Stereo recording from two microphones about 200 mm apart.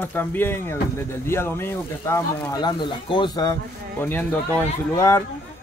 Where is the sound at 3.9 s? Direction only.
10° left (ahead or behind).